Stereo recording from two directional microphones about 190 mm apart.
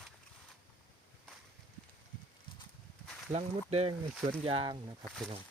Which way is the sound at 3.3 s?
35° right (ahead or behind).